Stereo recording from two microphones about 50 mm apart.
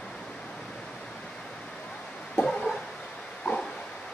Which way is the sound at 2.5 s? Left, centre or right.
Centre.